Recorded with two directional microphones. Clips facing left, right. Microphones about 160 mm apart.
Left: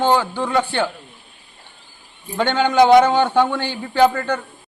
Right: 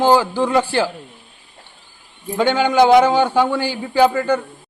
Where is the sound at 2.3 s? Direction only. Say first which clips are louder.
Right 1 dB; 10° right (ahead or behind).